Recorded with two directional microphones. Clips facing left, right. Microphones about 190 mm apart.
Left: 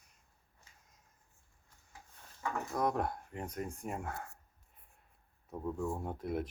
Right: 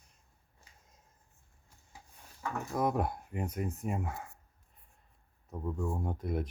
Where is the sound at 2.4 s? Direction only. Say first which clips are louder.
Right 2 dB; 5° right (ahead or behind).